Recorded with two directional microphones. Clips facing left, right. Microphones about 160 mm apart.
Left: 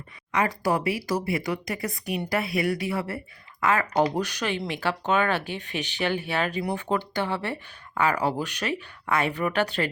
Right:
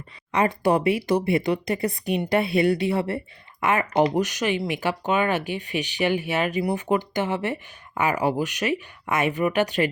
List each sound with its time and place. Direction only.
0.3 s speech: 25° right (ahead or behind)